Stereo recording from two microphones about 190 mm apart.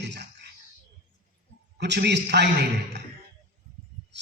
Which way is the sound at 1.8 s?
65° right (ahead or behind).